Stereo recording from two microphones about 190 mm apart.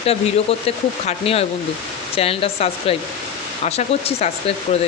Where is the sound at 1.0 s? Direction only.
30° left (ahead or behind).